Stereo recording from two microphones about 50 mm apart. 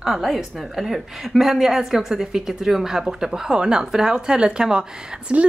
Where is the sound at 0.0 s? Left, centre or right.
Centre.